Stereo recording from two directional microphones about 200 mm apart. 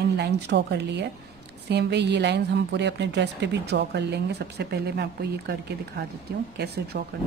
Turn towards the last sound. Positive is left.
turn(degrees=-55)  # may be behind; listen again after turning